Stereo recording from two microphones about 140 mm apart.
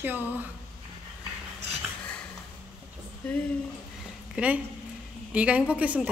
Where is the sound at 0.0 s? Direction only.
15° right (ahead or behind).